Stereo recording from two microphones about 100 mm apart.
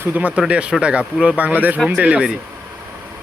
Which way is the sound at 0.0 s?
15° right (ahead or behind).